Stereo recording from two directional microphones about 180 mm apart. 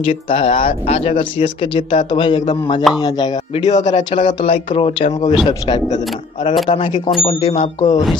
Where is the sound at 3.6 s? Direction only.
40° left (ahead or behind).